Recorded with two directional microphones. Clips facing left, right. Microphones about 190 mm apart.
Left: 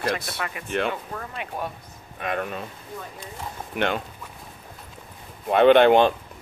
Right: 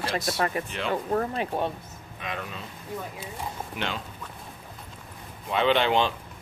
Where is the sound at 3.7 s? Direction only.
55° left (ahead or behind).